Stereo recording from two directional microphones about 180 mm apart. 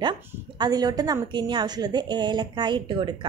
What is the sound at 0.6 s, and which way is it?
A woman's voice, 20° right (ahead or behind).